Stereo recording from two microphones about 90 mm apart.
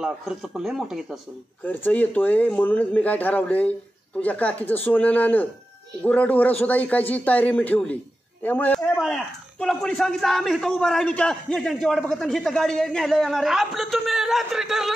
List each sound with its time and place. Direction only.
0.0 s a man's voice: 5° right (ahead or behind)
1.6 s a man's voice: 20° left (ahead or behind)
8.9 s a man's voice: 5° left (ahead or behind)